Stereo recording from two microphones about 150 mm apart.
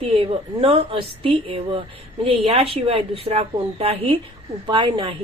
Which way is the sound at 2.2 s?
40° right (ahead or behind).